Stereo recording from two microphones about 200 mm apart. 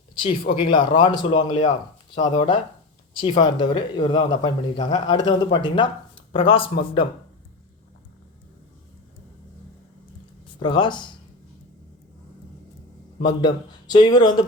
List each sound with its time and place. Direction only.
0.2 s speech: 25° left (ahead or behind)
10.6 s speech: 25° left (ahead or behind)
13.2 s speech: 20° left (ahead or behind)